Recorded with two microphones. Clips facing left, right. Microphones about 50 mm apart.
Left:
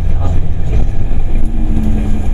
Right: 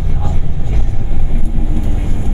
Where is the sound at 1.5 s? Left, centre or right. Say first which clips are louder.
Left 4 dB; centre.